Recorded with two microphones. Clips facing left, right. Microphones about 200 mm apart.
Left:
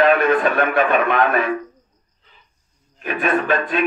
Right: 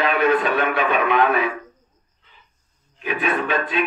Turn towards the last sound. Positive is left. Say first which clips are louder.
# left 3 dB
turn(degrees=50)  # may be behind; listen again after turning